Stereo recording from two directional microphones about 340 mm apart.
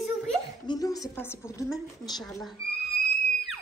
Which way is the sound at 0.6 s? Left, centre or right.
Centre.